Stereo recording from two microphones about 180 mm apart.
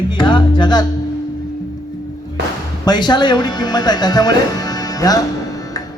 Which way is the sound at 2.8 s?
25° left (ahead or behind).